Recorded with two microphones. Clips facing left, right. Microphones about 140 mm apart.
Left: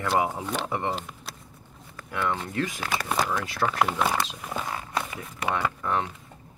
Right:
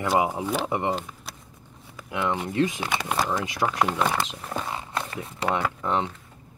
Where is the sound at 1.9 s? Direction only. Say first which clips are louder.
Right 2 dB; 15° right (ahead or behind).